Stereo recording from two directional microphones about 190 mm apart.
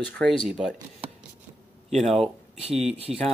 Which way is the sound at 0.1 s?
5° left (ahead or behind).